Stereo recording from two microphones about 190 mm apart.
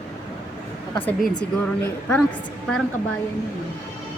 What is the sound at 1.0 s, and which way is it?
Speech, 5° left (ahead or behind).